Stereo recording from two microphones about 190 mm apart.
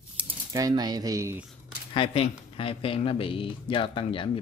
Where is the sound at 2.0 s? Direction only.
30° left (ahead or behind).